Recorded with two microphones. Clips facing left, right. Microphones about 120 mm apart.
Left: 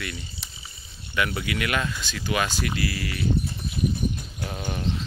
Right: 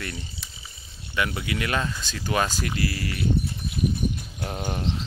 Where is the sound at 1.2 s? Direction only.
25° right (ahead or behind).